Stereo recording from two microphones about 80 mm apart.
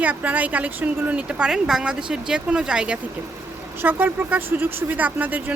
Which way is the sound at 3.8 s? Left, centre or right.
Right.